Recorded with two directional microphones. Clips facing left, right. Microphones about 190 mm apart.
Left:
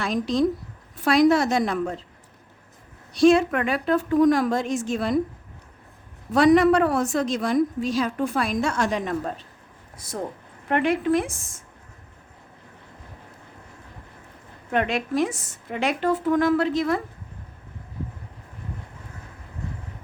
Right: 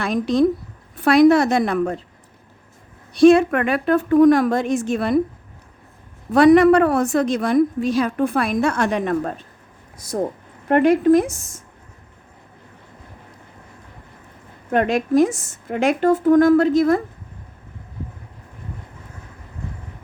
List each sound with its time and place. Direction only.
0.0 s a woman's voice: 60° right (ahead or behind)
3.2 s a woman's voice: 60° right (ahead or behind)
6.3 s a woman's voice: 60° right (ahead or behind)
10.7 s a woman's voice: 40° right (ahead or behind)
14.7 s speech: 45° right (ahead or behind)